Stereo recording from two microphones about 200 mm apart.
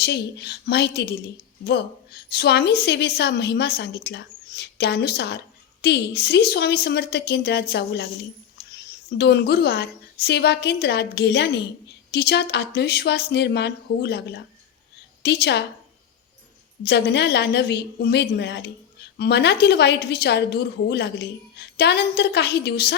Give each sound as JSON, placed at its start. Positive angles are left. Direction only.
{"t": 0.0, "sound": "a woman's voice", "side_deg": 55}
{"t": 16.8, "sound": "a woman's voice", "side_deg": 55}